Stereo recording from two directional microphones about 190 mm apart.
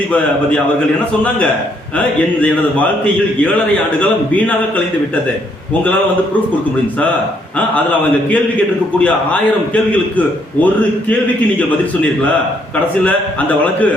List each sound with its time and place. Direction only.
2.0 s a man's voice: 5° left (ahead or behind)
9.0 s a man's voice: 10° left (ahead or behind)